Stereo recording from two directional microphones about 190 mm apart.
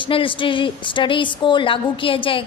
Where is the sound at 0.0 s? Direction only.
25° left (ahead or behind).